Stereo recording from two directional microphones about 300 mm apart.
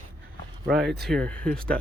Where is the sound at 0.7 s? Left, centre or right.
Centre.